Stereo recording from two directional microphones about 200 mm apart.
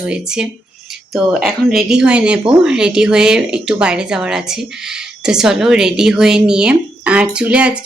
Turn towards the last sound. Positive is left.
turn(degrees=-5)  # may be behind; listen again after turning